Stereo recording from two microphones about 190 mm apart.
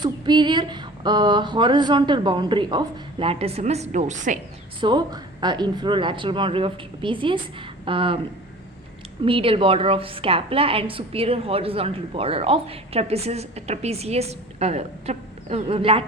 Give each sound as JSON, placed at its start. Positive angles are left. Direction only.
{"t": 0.0, "sound": "speech", "side_deg": -25}
{"t": 4.8, "sound": "speech", "side_deg": -25}
{"t": 9.2, "sound": "a woman's voice", "side_deg": -30}